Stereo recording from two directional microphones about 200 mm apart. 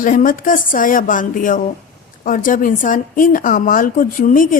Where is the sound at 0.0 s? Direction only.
40° left (ahead or behind).